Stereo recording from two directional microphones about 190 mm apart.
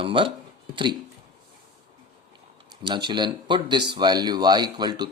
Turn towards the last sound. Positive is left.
turn(degrees=-20)  # may be behind; listen again after turning